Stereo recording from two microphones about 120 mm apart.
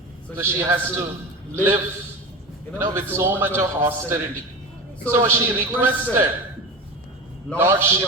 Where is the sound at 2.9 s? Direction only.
20° right (ahead or behind).